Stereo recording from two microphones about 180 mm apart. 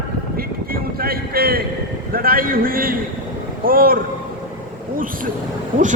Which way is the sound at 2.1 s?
55° right (ahead or behind).